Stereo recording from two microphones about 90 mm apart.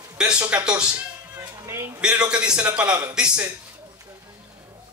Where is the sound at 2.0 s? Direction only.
10° right (ahead or behind).